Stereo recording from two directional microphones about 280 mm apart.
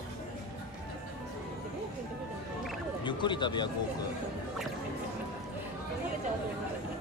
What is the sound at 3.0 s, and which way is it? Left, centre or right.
Speech, centre.